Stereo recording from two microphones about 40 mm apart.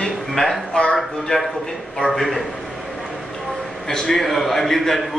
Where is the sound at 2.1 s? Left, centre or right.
Centre.